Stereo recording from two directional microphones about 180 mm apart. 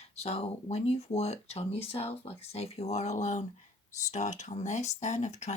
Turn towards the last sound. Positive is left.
turn(degrees=40)  # may be behind; listen again after turning